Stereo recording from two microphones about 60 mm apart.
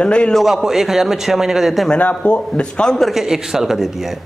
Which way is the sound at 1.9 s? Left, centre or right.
Left.